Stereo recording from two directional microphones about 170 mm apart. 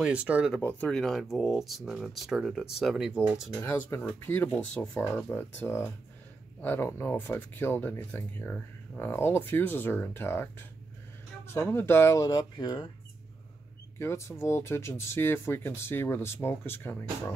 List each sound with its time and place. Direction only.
0.0 s speech: 10° right (ahead or behind)
0.6 s speech: 10° left (ahead or behind)
3.6 s speech: 10° left (ahead or behind)
11.5 s speech: 15° left (ahead or behind)
13.9 s speech: 15° left (ahead or behind)